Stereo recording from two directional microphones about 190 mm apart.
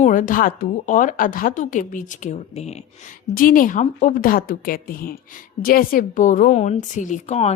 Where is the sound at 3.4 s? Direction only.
45° left (ahead or behind).